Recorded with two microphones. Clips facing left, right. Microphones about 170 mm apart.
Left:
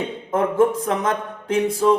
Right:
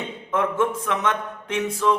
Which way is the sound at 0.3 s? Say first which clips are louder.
Left 5 dB; 35° left (ahead or behind).